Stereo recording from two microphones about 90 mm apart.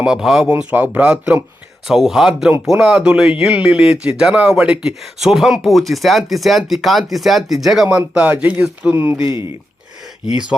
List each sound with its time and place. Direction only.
0.0 s speech: 5° right (ahead or behind)
0.5 s speech: 15° right (ahead or behind)